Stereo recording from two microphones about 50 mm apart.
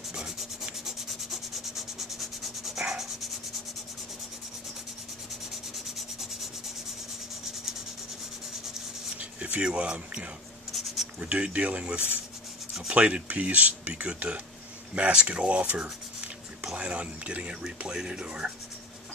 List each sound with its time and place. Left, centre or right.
0.7 s rub: centre
9.2 s speech: right